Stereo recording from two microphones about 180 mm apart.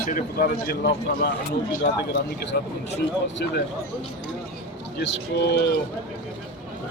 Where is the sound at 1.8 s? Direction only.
70° left (ahead or behind).